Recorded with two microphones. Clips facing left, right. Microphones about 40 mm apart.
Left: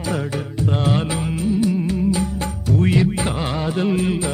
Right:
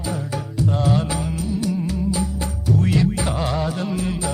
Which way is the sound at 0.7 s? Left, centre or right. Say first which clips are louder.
Left 1 dB; left.